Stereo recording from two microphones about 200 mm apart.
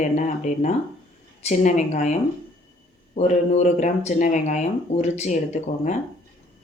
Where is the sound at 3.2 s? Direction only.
35° left (ahead or behind).